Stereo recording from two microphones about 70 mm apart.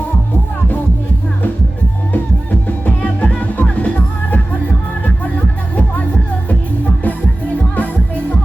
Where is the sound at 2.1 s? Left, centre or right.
Left.